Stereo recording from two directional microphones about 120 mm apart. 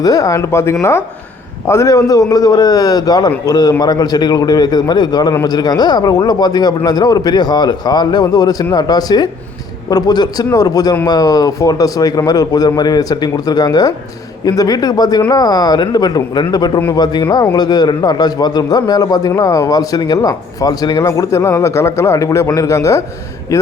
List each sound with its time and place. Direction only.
0.0 s a man's voice: 30° left (ahead or behind)